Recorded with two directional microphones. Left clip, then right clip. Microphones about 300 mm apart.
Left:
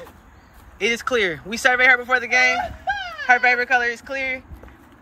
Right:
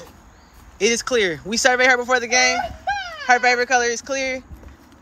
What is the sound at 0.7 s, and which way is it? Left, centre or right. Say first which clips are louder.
A man's voice: right 2 dB; centre.